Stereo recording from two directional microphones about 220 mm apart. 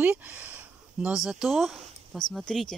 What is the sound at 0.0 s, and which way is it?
Speech, 5° right (ahead or behind).